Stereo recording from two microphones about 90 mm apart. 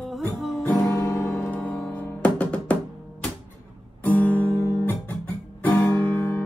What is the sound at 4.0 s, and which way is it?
Guitar, 20° left (ahead or behind).